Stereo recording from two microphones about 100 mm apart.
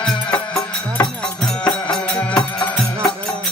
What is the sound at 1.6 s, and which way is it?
Music, 10° left (ahead or behind).